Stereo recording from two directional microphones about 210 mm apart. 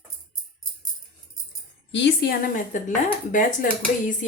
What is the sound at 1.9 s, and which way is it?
A woman's voice, 55° left (ahead or behind).